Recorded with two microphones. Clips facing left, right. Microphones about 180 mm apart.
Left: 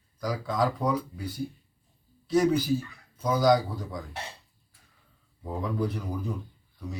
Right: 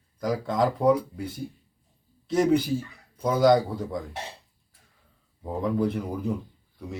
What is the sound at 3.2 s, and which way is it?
Speech, 25° right (ahead or behind).